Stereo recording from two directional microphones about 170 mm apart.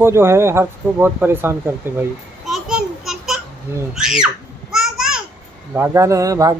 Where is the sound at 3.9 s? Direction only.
5° right (ahead or behind).